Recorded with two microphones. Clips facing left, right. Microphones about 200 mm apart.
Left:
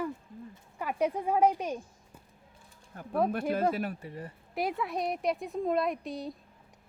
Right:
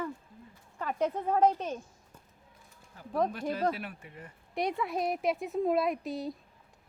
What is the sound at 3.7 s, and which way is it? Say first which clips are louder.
Speech: left 4 dB; 40° left (ahead or behind).